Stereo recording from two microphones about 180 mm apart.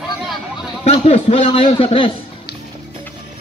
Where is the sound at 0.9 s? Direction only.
35° left (ahead or behind).